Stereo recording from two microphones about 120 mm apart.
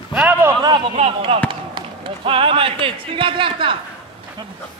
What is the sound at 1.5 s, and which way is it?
Speech, 45° right (ahead or behind).